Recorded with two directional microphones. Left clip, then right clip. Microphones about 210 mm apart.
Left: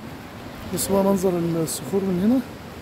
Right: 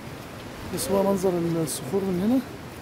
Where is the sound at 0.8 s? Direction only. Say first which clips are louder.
Left 2 dB; 10° left (ahead or behind).